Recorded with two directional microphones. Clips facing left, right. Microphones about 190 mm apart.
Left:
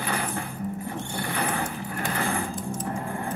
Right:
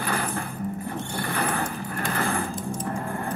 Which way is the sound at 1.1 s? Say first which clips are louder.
Right 1 dB; 15° left (ahead or behind).